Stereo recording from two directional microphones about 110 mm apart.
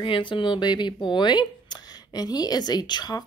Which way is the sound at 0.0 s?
50° left (ahead or behind).